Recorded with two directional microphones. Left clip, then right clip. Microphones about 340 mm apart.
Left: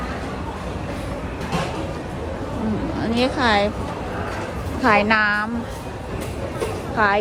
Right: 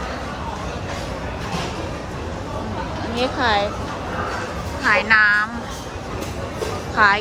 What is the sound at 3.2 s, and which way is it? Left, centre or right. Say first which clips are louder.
Speech: even; centre.